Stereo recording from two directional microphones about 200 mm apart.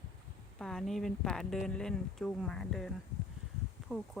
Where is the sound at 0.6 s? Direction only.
Centre (ahead or behind).